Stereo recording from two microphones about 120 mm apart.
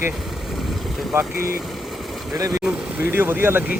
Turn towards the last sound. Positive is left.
turn(degrees=-20)  # may be behind; listen again after turning